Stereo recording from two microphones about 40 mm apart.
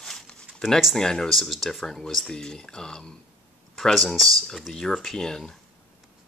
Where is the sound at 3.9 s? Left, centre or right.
Centre.